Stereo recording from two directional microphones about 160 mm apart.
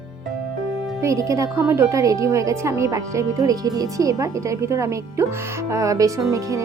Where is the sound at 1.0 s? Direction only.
20° right (ahead or behind).